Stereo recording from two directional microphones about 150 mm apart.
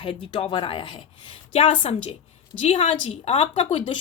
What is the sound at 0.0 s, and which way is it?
A woman's voice, 35° left (ahead or behind).